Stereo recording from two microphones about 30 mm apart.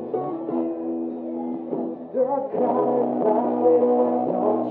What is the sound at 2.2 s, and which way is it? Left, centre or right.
Music, centre.